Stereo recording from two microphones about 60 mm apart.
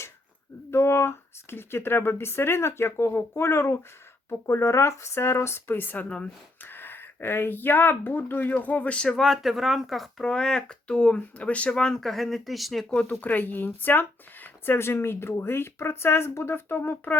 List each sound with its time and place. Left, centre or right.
0.7 s speech: left
4.6 s speech: left
9.0 s speech: centre
12.0 s speech: centre
13.2 s speech: left